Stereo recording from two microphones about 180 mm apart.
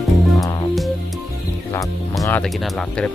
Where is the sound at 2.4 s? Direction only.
5° left (ahead or behind).